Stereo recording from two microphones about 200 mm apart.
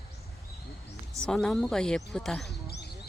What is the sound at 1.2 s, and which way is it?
Speech, 5° left (ahead or behind).